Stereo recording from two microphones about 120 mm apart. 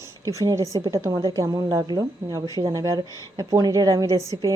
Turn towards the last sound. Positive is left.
turn(degrees=-30)  # may be behind; listen again after turning